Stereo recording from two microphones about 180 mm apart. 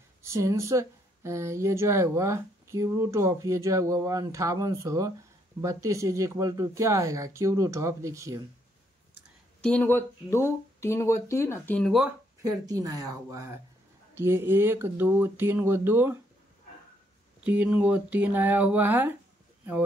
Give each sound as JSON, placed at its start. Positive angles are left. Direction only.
{"t": 0.2, "sound": "speech", "side_deg": -15}
{"t": 9.6, "sound": "speech", "side_deg": 5}
{"t": 12.4, "sound": "speech", "side_deg": -20}
{"t": 17.4, "sound": "speech", "side_deg": -10}